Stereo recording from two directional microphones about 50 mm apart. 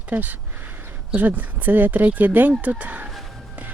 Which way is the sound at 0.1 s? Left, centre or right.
Right.